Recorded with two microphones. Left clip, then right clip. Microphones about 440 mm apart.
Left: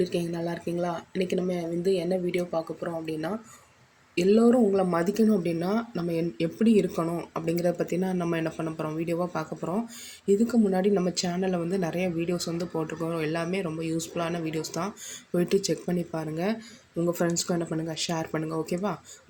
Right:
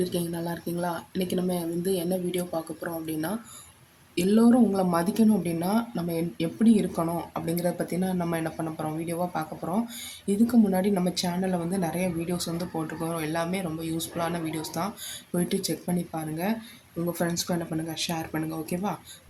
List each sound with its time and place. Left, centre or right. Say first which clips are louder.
0.0 s speech: left 1 dB; right